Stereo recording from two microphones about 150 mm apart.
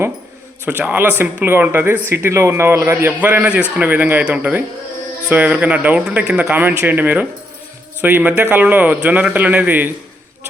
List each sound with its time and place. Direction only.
0.6 s speech: 10° right (ahead or behind)